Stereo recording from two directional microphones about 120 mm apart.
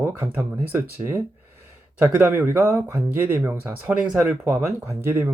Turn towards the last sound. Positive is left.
turn(degrees=-20)  # may be behind; listen again after turning